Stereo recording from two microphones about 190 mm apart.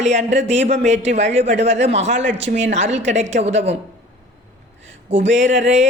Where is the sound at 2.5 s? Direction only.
35° right (ahead or behind).